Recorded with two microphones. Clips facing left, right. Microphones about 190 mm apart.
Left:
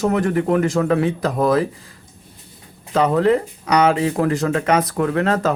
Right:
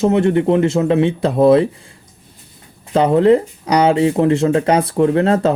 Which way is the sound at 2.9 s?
30° right (ahead or behind).